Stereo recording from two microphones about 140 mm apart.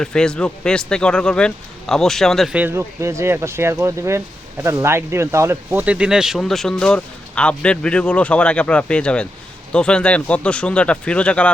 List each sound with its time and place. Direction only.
0.0 s speech: 5° left (ahead or behind)
2.6 s speech: 15° right (ahead or behind); by 11.5 s 10° left (ahead or behind)